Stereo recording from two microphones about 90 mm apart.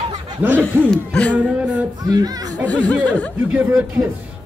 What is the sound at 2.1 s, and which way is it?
Speech, 45° right (ahead or behind).